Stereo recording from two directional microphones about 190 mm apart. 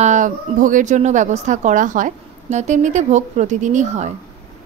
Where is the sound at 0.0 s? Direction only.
40° right (ahead or behind).